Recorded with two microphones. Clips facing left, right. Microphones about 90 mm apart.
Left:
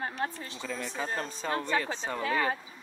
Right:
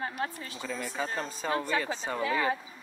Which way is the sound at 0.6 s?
10° right (ahead or behind).